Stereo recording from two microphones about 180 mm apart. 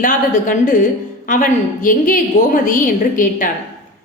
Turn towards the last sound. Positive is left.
turn(degrees=50)  # may be behind; listen again after turning